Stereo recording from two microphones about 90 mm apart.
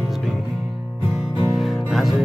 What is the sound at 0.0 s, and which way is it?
Music, centre (ahead or behind).